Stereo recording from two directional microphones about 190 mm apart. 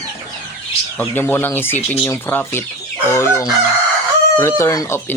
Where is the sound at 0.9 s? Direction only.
10° left (ahead or behind).